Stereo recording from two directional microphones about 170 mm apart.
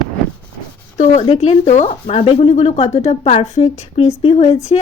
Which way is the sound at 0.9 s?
40° left (ahead or behind).